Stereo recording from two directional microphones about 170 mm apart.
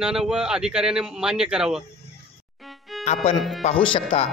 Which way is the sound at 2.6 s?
Centre (ahead or behind).